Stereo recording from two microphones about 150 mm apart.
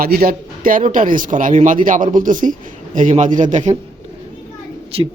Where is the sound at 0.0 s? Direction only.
80° right; by 3.8 s 55° right (ahead or behind).